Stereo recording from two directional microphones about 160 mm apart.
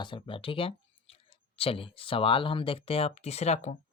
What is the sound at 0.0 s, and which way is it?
Speech, 30° left (ahead or behind).